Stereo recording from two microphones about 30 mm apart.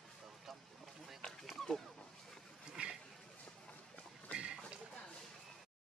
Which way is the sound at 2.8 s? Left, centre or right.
Right.